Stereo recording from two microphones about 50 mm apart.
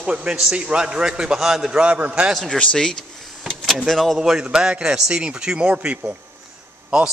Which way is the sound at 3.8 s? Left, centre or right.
Centre.